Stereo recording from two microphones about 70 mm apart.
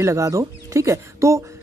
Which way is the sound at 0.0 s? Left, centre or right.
Right.